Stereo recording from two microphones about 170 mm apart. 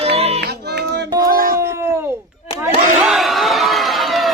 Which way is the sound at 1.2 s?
60° right (ahead or behind).